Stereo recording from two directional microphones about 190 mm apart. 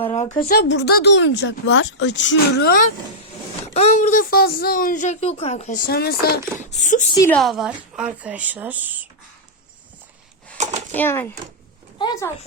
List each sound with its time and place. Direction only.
0.0 s speech: 35° left (ahead or behind)
0.5 s a woman's voice: 65° left (ahead or behind)
3.8 s speech: 35° left (ahead or behind); by 6.7 s 55° left (ahead or behind)
6.7 s speech: 40° left (ahead or behind)
7.3 s a woman's voice: 5° left (ahead or behind)
10.6 s a sound: 40° right (ahead or behind)
10.9 s speech: 10° left (ahead or behind)
11.9 s speech: 25° left (ahead or behind)